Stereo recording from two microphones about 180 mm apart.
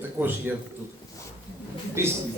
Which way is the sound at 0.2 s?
10° right (ahead or behind).